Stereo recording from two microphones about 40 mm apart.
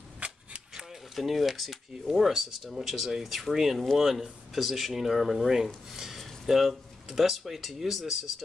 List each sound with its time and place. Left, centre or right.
0.2 s cap gun: right
1.1 s speech: centre
6.2 s a sound: centre
7.1 s speech: centre